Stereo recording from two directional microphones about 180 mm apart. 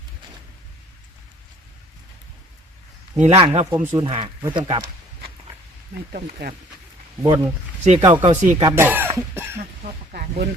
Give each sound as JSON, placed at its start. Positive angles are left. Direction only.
{"t": 3.2, "sound": "speech", "side_deg": -35}
{"t": 3.8, "sound": "speech", "side_deg": -10}
{"t": 4.0, "sound": "speech", "side_deg": -30}
{"t": 6.1, "sound": "speech", "side_deg": -50}
{"t": 7.2, "sound": "speech", "side_deg": -15}
{"t": 7.9, "sound": "speech", "side_deg": -30}
{"t": 8.7, "sound": "speech", "side_deg": -10}
{"t": 10.1, "sound": "speech", "side_deg": -60}